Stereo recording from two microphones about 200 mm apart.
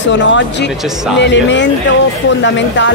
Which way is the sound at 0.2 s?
65° left (ahead or behind).